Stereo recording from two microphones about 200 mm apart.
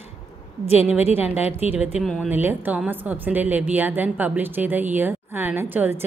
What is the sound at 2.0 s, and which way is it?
Speech, centre (ahead or behind).